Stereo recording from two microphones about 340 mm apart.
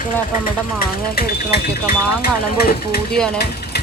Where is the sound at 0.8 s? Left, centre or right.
Left.